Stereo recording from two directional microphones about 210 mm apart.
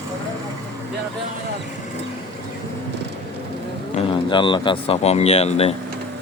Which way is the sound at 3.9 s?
25° left (ahead or behind).